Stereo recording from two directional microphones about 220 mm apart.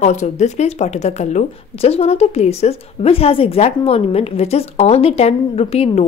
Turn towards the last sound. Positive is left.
turn(degrees=30)  # may be behind; listen again after turning